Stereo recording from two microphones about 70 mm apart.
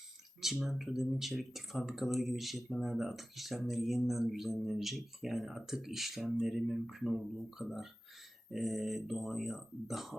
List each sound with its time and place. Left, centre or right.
0.5 s speech: centre